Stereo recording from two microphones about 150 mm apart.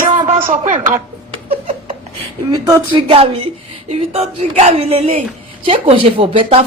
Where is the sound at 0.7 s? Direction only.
55° right (ahead or behind).